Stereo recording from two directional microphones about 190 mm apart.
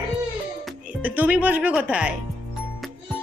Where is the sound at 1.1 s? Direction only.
10° right (ahead or behind).